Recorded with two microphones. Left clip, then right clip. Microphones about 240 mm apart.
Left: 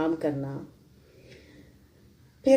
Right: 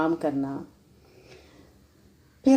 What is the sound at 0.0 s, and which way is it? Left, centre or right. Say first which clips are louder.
Speech: right 2 dB; right.